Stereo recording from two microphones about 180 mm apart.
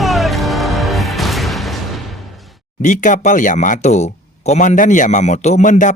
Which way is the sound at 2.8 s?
45° left (ahead or behind).